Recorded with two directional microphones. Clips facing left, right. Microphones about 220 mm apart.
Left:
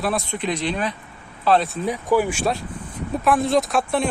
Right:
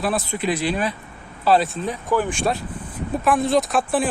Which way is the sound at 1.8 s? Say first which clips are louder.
Left 2 dB; 10° left (ahead or behind).